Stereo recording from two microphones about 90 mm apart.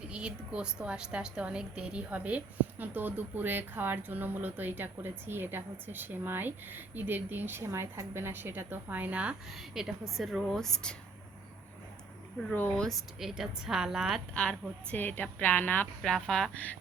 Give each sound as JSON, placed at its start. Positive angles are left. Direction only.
{"t": 0.1, "sound": "a woman's voice", "side_deg": -10}
{"t": 9.5, "sound": "a woman's voice", "side_deg": -5}
{"t": 12.5, "sound": "a woman's voice", "side_deg": 20}
{"t": 12.8, "sound": "a woman's voice", "side_deg": 0}
{"t": 14.3, "sound": "a woman's voice", "side_deg": 10}
{"t": 16.0, "sound": "speech", "side_deg": 5}